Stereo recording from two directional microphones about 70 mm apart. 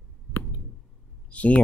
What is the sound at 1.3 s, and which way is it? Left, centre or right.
Speech, centre.